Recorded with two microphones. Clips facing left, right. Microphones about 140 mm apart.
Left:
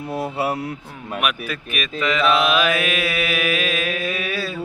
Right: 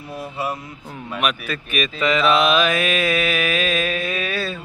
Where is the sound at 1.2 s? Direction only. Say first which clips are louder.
Right 1 dB; 5° left (ahead or behind).